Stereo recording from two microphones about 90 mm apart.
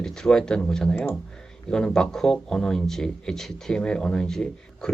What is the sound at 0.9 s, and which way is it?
Speech, 25° left (ahead or behind).